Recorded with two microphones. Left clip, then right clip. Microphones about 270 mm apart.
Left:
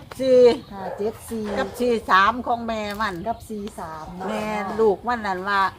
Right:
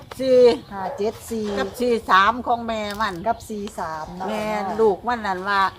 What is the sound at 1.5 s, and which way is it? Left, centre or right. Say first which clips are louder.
A woman's voice: even; centre.